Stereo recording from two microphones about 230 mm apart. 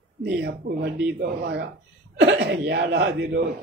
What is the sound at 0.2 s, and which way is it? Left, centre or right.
Speech, right.